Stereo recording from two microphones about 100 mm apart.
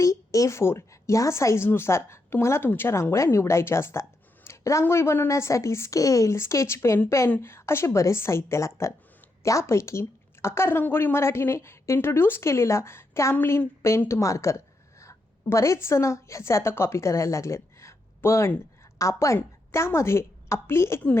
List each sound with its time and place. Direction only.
0.0 s a woman's voice: 30° left (ahead or behind)